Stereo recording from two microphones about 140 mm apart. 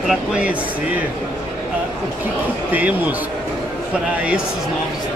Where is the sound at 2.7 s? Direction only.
10° right (ahead or behind).